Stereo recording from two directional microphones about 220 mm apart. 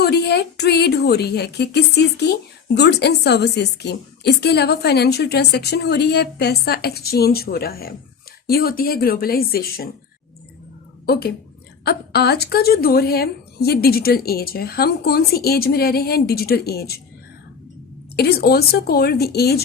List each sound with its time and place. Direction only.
0.0 s a woman's voice: 50° left (ahead or behind)
11.0 s a woman's voice: 45° left (ahead or behind)
18.2 s a woman's voice: 45° left (ahead or behind)